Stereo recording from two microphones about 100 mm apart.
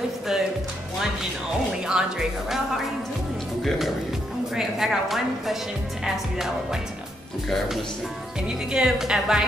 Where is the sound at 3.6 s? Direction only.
Centre (ahead or behind).